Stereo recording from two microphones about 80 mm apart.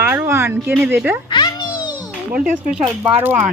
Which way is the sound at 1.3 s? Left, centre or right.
Left.